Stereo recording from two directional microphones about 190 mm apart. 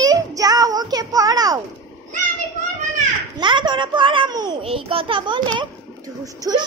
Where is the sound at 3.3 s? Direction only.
25° right (ahead or behind).